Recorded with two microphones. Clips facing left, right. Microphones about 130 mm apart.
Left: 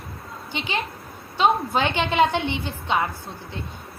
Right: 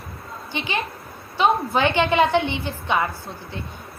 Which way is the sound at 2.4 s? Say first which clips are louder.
Right 4 dB; 15° right (ahead or behind).